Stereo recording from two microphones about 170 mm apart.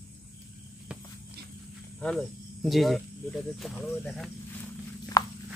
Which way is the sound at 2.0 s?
5° left (ahead or behind).